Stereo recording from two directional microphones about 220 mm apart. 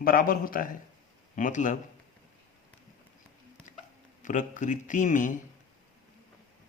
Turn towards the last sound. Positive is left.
turn(degrees=35)  # may be behind; listen again after turning